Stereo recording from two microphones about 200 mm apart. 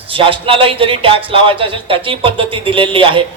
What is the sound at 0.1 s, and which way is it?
Speech, 25° right (ahead or behind).